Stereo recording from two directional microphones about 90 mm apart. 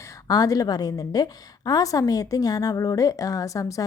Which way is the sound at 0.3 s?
40° left (ahead or behind).